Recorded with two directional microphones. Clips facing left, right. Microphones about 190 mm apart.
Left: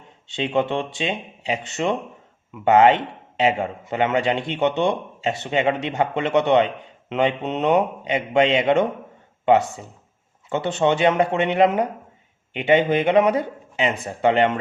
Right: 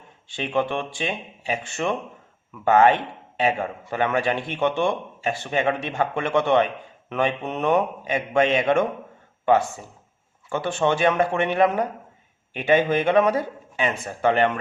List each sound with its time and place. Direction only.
0.3 s speech: 25° left (ahead or behind)